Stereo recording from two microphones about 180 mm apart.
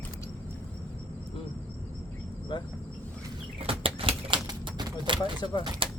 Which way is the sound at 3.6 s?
30° right (ahead or behind).